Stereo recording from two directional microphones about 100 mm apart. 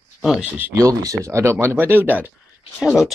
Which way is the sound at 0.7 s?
35° right (ahead or behind).